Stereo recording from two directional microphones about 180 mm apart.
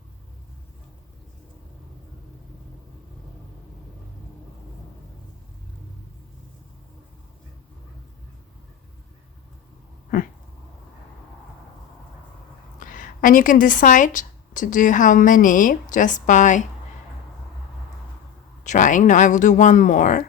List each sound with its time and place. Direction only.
12.8 s a woman's voice: 50° left (ahead or behind)
18.6 s speech: 45° left (ahead or behind)